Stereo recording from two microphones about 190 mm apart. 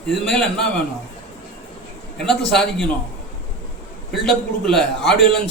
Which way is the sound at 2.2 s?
Centre (ahead or behind).